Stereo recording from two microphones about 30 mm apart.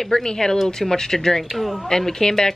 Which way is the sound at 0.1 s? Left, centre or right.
Left.